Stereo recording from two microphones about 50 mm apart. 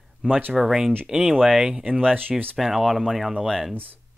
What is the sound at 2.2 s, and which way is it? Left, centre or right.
Speech, right.